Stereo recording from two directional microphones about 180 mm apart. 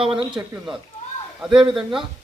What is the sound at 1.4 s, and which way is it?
Speech, 5° right (ahead or behind).